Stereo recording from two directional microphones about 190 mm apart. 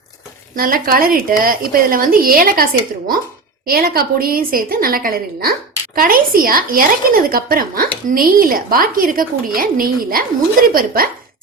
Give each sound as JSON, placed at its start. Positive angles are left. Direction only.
{"t": 0.5, "sound": "a woman's voice", "side_deg": -50}
{"t": 3.7, "sound": "a woman's voice", "side_deg": -50}